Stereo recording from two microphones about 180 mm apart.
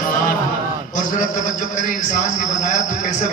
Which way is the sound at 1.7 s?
45° left (ahead or behind).